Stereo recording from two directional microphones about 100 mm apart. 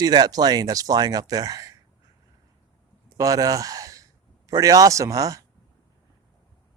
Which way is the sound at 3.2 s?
35° right (ahead or behind).